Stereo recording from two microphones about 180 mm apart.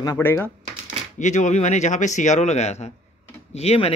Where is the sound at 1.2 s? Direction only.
40° left (ahead or behind).